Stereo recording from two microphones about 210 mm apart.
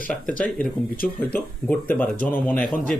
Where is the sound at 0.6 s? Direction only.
40° left (ahead or behind).